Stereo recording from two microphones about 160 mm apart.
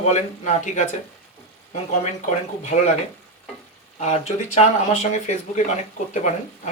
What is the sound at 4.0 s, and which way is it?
Speech, 45° left (ahead or behind).